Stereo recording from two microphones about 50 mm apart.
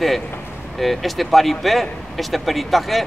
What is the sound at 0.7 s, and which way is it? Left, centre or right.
Speech, centre.